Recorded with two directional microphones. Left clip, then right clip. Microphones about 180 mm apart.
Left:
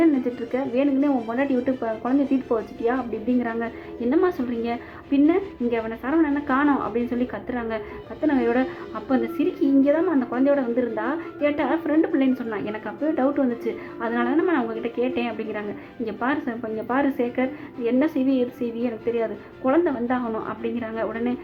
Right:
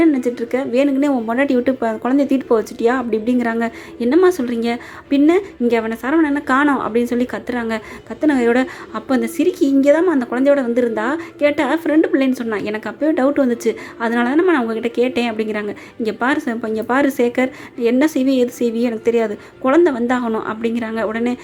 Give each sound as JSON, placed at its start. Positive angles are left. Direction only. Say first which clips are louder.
{"t": 0.0, "sound": "a woman's voice", "louder": "right 5 dB", "side_deg": -35}